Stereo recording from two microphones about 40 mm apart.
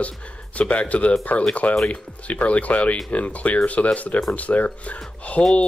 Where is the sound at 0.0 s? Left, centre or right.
Left.